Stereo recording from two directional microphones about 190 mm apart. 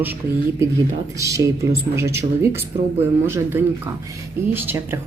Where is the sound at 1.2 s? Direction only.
15° right (ahead or behind).